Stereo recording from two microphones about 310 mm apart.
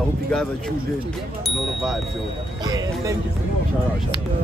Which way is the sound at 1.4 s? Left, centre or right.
Centre.